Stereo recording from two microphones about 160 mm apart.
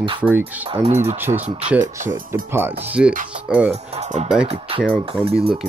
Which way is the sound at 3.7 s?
45° right (ahead or behind).